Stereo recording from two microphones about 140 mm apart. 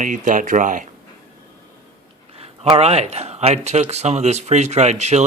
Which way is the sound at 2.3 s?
45° right (ahead or behind).